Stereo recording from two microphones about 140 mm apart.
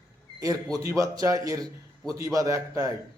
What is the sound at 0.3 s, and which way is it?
A man's voice, 25° right (ahead or behind).